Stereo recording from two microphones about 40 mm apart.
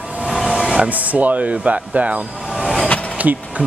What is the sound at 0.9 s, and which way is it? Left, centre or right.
Speech, right.